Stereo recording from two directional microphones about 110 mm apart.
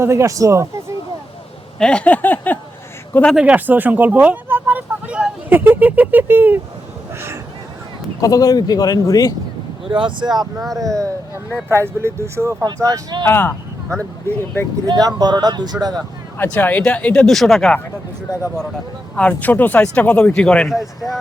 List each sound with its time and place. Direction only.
0.0 s speech: 25° right (ahead or behind)
1.8 s speech: 10° left (ahead or behind)
3.3 s speech: 15° right (ahead or behind)
8.2 s speech: 35° left (ahead or behind)
9.9 s speech: 50° right (ahead or behind)
10.4 s speech: centre (ahead or behind)
10.8 s speech: 30° right (ahead or behind)
12.6 s speech: 35° right (ahead or behind)
13.2 s speech: 20° left (ahead or behind)
14.8 s speech: 35° right (ahead or behind)
16.4 s speech: 15° left (ahead or behind)
19.1 s speech: 10° left (ahead or behind)